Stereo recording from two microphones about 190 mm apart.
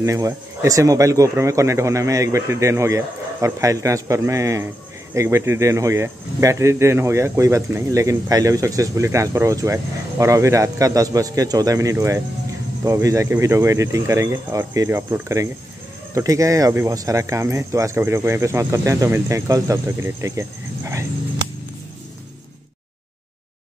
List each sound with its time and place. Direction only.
0.0 s speech: 15° right (ahead or behind)